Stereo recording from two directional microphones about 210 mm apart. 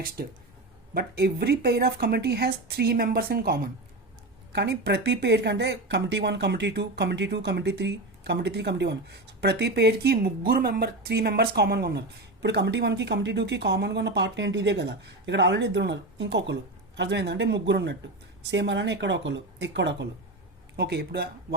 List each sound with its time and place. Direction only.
0.2 s speech: 45° right (ahead or behind)